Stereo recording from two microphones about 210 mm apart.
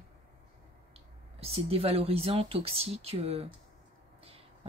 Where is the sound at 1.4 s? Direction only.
30° right (ahead or behind).